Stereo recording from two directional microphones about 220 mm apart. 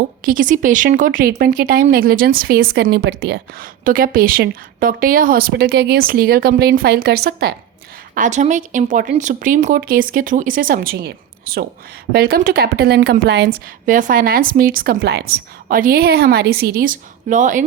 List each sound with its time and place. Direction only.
0.3 s a woman's voice: 35° right (ahead or behind)
8.1 s a woman's voice: 35° right (ahead or behind)